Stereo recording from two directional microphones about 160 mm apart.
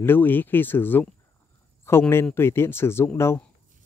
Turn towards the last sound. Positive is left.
turn(degrees=15)  # may be behind; listen again after turning